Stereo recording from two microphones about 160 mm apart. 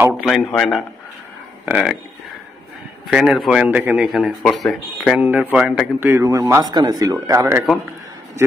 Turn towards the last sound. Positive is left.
turn(degrees=-15)  # may be behind; listen again after turning